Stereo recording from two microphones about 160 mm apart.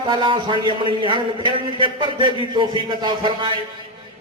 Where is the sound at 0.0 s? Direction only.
30° right (ahead or behind).